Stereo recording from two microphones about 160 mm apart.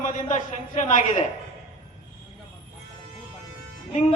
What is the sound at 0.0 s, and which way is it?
A woman's voice, 50° left (ahead or behind).